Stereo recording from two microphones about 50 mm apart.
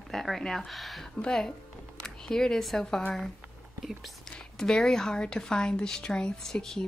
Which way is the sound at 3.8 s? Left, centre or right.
Centre.